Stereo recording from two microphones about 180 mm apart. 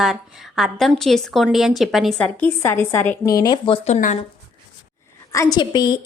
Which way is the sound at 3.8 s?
40° left (ahead or behind).